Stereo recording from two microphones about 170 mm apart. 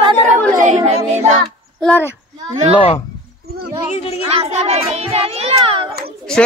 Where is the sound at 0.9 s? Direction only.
40° right (ahead or behind).